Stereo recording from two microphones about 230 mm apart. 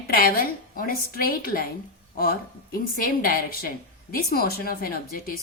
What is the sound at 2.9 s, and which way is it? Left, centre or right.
Speech, left.